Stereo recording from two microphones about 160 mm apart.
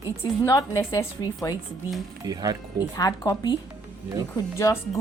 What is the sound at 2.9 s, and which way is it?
Speech, 20° left (ahead or behind).